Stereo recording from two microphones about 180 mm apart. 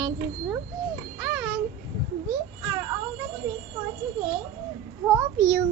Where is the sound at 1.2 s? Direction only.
10° right (ahead or behind).